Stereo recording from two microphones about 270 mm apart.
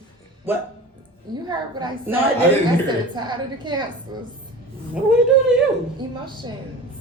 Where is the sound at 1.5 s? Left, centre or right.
Centre.